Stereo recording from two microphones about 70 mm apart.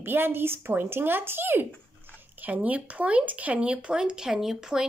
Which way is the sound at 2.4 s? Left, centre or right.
Right.